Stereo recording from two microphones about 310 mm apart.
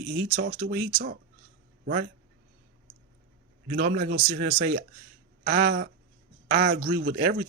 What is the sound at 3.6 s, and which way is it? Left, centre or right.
Speech, right.